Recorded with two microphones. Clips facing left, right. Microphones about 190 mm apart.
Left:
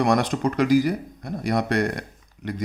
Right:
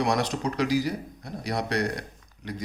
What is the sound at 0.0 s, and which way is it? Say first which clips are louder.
Speech: left 5 dB; 50° left (ahead or behind).